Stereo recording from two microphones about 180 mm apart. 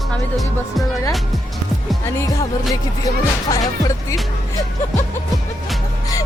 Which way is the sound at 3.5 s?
20° left (ahead or behind).